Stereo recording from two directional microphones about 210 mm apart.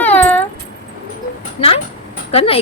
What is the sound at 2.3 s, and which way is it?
Speech, 30° left (ahead or behind).